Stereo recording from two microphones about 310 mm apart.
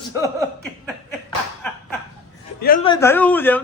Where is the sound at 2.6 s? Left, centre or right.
Left.